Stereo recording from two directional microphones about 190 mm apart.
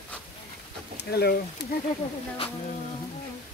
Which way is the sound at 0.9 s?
60° left (ahead or behind).